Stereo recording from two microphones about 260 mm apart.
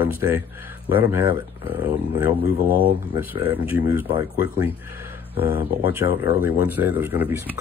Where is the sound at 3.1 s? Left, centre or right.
Centre.